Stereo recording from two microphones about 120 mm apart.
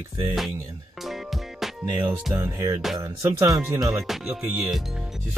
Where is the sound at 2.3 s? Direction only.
25° right (ahead or behind).